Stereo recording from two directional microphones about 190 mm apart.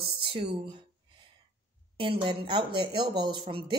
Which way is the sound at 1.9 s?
25° right (ahead or behind).